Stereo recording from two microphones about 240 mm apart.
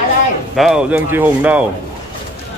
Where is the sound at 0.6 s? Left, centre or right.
Centre.